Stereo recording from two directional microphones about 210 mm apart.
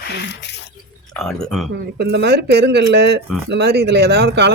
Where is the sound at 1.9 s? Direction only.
55° right (ahead or behind).